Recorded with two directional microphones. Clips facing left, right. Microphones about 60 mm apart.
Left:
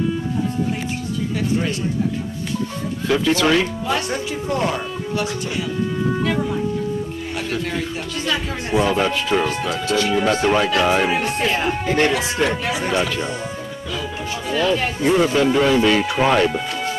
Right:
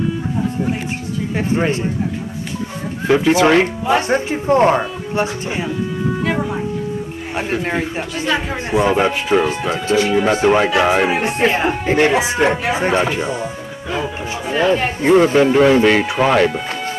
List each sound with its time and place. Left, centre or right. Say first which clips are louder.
3.1 s speech: right 5 dB; right
14.5 s speech: right 4 dB; right